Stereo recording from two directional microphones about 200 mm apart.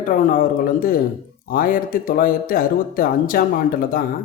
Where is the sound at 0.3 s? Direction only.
45° left (ahead or behind).